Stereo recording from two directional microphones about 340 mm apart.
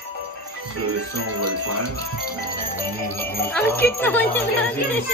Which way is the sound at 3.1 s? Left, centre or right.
Centre.